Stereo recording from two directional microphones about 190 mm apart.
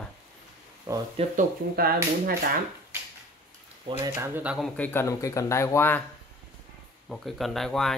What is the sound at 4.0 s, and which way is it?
Speech, 10° right (ahead or behind).